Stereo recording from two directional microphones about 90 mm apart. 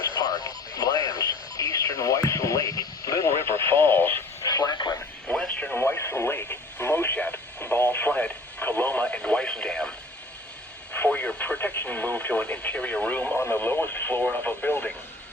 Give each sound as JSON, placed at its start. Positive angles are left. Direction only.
{"t": 0.1, "sound": "radio", "side_deg": 45}
{"t": 4.4, "sound": "radio", "side_deg": 45}
{"t": 5.3, "sound": "radio", "side_deg": 10}
{"t": 5.7, "sound": "radio", "side_deg": 25}
{"t": 10.9, "sound": "radio", "side_deg": 20}